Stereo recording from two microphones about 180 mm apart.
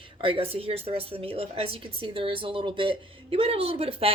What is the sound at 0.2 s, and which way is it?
A woman's voice, 30° right (ahead or behind).